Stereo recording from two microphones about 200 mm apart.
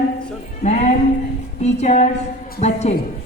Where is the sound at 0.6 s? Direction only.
35° left (ahead or behind).